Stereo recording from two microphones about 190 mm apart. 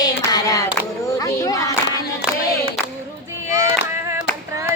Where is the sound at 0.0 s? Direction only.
20° left (ahead or behind).